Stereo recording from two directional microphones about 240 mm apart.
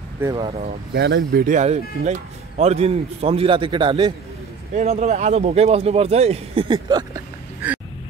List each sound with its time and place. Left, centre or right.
0.2 s speech: centre
0.5 s speech: right
0.9 s speech: right; by 7.2 s centre